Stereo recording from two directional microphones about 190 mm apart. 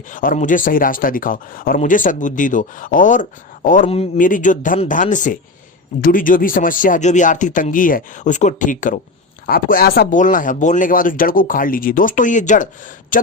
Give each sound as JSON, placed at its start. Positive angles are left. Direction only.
{"t": 0.1, "sound": "a man's voice", "side_deg": 45}